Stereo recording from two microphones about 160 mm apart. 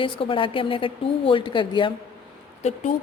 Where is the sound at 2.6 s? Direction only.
45° left (ahead or behind).